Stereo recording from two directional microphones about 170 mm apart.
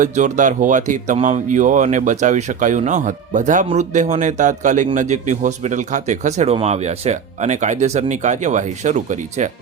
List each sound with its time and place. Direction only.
0.0 s speech: 45° right (ahead or behind)